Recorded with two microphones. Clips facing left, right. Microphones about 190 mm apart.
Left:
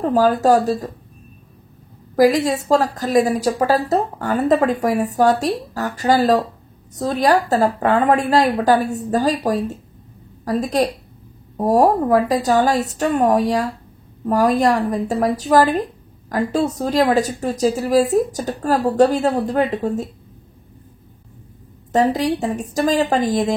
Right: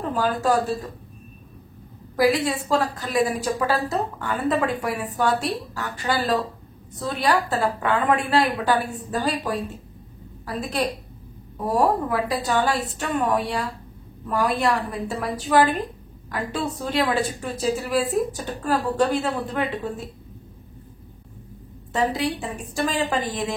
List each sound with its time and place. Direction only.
0.0 s a woman's voice: 40° left (ahead or behind)
2.1 s a woman's voice: 40° left (ahead or behind)
21.9 s a woman's voice: 40° left (ahead or behind)